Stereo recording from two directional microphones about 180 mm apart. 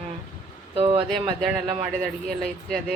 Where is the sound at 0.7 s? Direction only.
30° right (ahead or behind).